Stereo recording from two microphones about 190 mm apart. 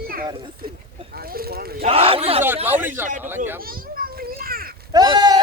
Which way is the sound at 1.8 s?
30° right (ahead or behind).